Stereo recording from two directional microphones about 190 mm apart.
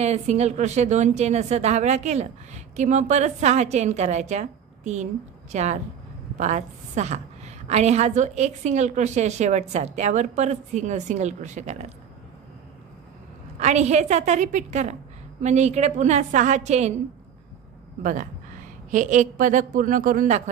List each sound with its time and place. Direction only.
0.0 s a woman's voice: 35° right (ahead or behind)
13.6 s a woman's voice: 35° right (ahead or behind)
18.9 s a woman's voice: 40° right (ahead or behind)